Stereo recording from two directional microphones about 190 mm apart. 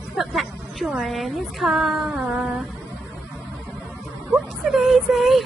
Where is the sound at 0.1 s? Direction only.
Centre (ahead or behind).